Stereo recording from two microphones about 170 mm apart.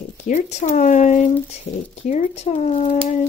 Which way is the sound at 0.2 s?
45° left (ahead or behind).